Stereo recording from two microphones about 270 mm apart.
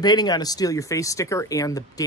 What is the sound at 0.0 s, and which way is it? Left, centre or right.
Speech, centre.